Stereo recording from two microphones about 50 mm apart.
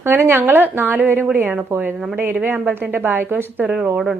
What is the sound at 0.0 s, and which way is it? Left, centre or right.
A woman's voice, right.